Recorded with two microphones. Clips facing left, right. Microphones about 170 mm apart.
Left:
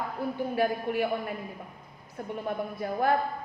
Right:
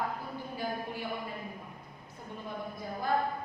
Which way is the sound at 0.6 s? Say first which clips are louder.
Left 10 dB; 70° left (ahead or behind).